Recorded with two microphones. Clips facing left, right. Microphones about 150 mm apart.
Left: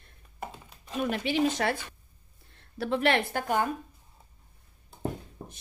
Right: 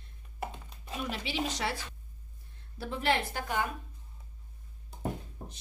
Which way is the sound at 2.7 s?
70° left (ahead or behind).